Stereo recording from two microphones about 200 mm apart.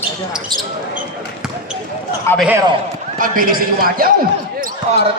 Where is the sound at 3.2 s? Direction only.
45° right (ahead or behind).